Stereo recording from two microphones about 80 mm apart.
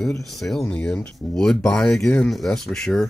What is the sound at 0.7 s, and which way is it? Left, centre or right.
Speech, centre.